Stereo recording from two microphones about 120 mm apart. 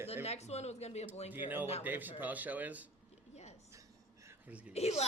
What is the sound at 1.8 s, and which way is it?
A man's voice, 15° right (ahead or behind).